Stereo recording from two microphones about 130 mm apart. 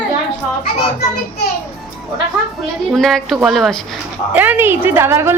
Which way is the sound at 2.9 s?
5° left (ahead or behind).